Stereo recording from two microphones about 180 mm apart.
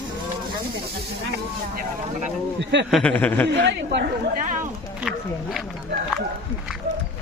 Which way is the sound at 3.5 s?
75° right (ahead or behind).